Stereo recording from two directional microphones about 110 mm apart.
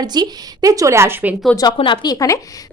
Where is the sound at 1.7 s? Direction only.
50° left (ahead or behind); by 2.3 s 35° left (ahead or behind).